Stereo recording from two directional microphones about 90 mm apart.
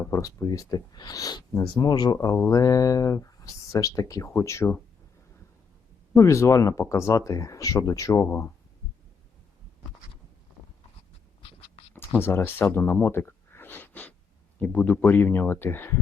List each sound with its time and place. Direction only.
0.1 s speech: 35° left (ahead or behind)
2.2 s speech: 35° left (ahead or behind)
6.1 s speech: 35° left (ahead or behind)
11.9 s speech: 25° left (ahead or behind)
12.7 s a sound: 25° left (ahead or behind)
14.6 s speech: 15° left (ahead or behind)